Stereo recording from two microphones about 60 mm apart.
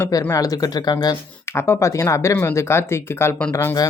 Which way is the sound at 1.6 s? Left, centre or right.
Left.